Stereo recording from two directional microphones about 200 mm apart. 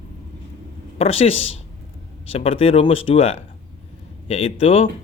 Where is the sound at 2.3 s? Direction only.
30° left (ahead or behind).